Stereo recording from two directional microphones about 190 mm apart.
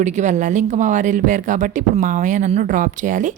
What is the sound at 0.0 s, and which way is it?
Speech, 40° right (ahead or behind).